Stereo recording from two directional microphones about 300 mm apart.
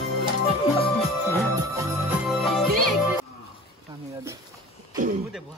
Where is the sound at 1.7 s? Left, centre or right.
Centre.